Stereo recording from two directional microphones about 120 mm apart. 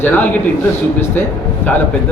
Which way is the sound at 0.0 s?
15° left (ahead or behind).